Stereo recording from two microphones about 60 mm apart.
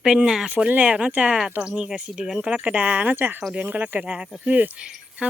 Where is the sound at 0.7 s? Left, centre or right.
Right; by 2.4 s centre.